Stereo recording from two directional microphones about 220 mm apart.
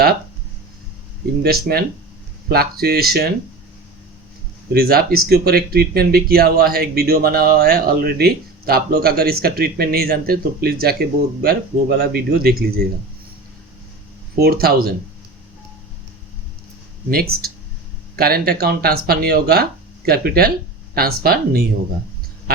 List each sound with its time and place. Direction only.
1.4 s speech: 45° right (ahead or behind)
4.7 s speech: 45° right (ahead or behind)
14.3 s speech: 45° right (ahead or behind)
17.1 s speech: 45° right (ahead or behind)